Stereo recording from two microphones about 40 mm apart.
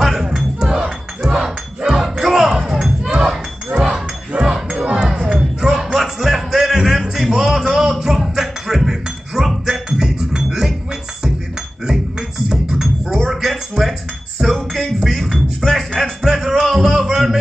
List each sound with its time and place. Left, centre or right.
0.0 s chink: centre
3.1 s a sound: centre
4.3 s music: right
4.6 s music: right
4.9 s music: centre
8.4 s chink: centre
11.8 s music: centre
12.8 s cutlery: centre
14.4 s music: centre
15.7 s music: centre
17.1 s a sound: centre